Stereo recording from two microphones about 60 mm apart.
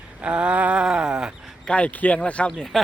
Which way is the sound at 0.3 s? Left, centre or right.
Centre.